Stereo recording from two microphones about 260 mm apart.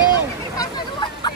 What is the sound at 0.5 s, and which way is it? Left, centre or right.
Hubbub, centre.